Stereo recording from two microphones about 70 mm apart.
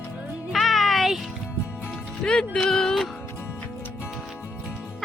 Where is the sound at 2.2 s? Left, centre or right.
Centre.